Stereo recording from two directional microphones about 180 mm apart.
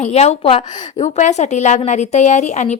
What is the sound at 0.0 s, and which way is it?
A woman's voice, 35° left (ahead or behind).